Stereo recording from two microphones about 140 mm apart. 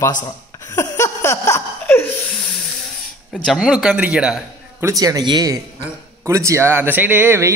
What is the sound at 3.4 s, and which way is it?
Speech, 5° right (ahead or behind).